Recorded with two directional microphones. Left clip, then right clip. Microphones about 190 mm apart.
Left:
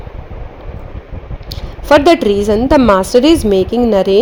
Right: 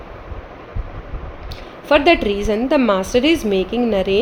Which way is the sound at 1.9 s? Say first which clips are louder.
Left 5 dB; 35° left (ahead or behind).